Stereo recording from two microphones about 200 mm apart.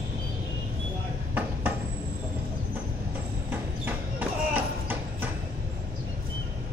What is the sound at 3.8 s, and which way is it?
Clip-clop, 10° right (ahead or behind).